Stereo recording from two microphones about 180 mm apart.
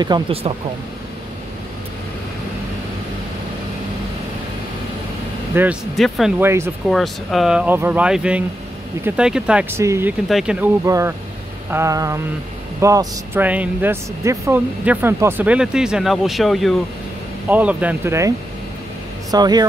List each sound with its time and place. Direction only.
0.0 s speech: 25° right (ahead or behind)
5.5 s speech: 10° right (ahead or behind)
5.9 s speech: centre (ahead or behind)
6.4 s speech: 15° right (ahead or behind)
6.9 s speech: centre (ahead or behind)
10.2 s speech: 5° right (ahead or behind)
10.9 s speech: 15° right (ahead or behind)
19.3 s speech: 20° right (ahead or behind)